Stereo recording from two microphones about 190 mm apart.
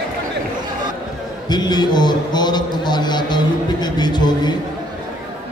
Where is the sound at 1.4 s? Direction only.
20° left (ahead or behind).